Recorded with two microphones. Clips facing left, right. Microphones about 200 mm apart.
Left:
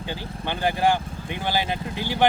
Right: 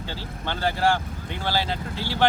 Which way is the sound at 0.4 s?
15° left (ahead or behind).